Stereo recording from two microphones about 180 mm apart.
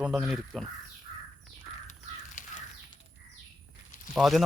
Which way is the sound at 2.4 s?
45° left (ahead or behind).